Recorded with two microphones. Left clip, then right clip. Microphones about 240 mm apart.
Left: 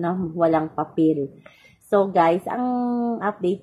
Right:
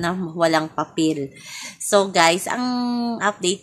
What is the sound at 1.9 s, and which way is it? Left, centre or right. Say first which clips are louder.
A woman's voice: right 2 dB; right.